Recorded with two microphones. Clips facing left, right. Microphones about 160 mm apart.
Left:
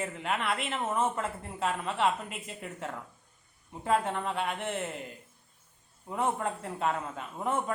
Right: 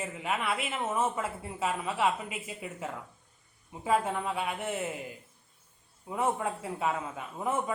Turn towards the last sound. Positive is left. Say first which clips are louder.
# even
turn(degrees=-5)  # may be behind; listen again after turning